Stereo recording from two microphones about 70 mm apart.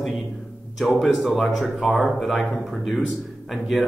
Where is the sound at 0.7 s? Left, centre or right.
Centre.